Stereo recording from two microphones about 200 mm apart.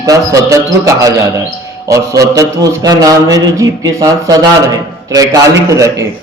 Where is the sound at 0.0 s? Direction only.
15° right (ahead or behind).